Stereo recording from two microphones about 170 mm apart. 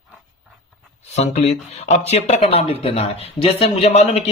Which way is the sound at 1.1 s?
40° left (ahead or behind).